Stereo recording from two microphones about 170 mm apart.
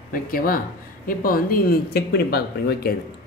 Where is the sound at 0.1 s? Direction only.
55° left (ahead or behind).